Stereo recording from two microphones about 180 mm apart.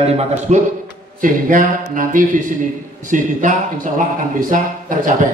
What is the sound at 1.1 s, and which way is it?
A man's voice, 50° right (ahead or behind).